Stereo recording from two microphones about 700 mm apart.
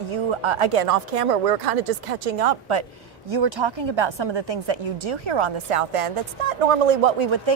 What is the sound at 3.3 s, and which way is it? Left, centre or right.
A woman's voice, right.